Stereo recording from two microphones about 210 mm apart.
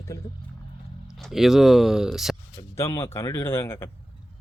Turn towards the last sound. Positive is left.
turn(degrees=10)  # may be behind; listen again after turning